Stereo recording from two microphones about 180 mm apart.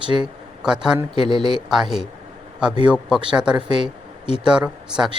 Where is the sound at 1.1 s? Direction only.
25° right (ahead or behind).